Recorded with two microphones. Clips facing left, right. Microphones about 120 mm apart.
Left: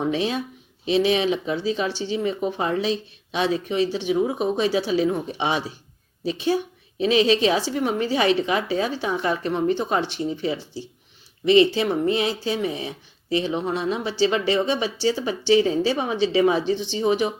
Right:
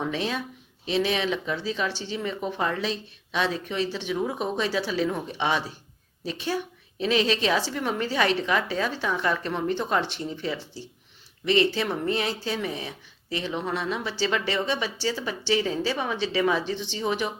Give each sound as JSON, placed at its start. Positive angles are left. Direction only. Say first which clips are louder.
{"t": 0.1, "sound": "speech", "louder": "left 5 dB", "side_deg": 20}